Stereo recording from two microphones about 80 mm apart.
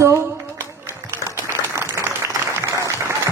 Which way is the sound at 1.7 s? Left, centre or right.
Right.